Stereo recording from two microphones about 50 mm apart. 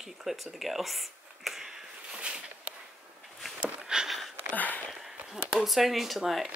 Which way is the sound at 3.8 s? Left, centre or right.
Centre.